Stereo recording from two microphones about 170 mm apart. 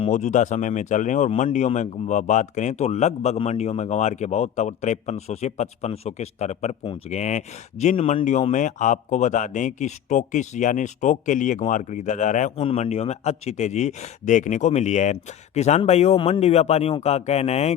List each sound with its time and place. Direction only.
0.0 s a man's voice: 45° left (ahead or behind)